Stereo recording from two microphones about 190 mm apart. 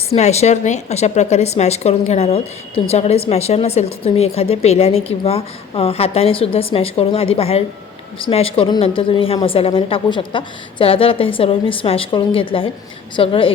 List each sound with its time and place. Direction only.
0.1 s a woman's voice: 35° left (ahead or behind)